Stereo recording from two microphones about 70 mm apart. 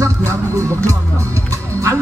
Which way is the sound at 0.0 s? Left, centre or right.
Right.